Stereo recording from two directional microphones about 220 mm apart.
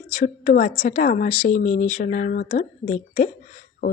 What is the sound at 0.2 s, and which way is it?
A woman's voice, 35° left (ahead or behind).